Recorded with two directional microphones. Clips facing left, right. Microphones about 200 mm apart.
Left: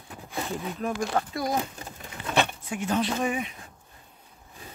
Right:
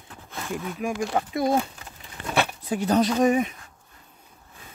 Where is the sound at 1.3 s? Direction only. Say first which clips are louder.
Right 6 dB; 25° right (ahead or behind).